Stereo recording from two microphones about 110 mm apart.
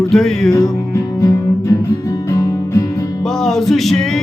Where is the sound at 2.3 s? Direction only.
30° left (ahead or behind).